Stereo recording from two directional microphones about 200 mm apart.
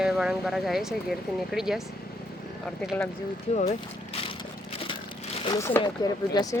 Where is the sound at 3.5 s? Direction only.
35° left (ahead or behind).